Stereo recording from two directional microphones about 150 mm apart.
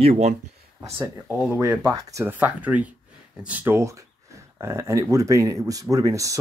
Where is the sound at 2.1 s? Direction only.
15° right (ahead or behind).